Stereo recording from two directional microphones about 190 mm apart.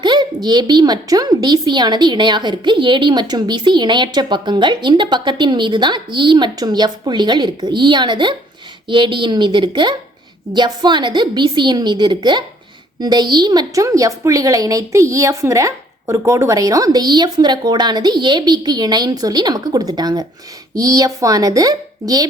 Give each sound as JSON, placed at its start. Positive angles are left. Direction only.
{"t": 0.0, "sound": "a woman's voice", "side_deg": -25}